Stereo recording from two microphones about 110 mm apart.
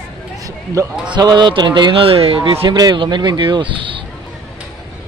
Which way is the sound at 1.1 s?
40° right (ahead or behind).